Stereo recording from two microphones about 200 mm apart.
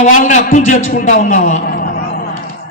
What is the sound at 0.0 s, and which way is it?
Speech, 40° left (ahead or behind).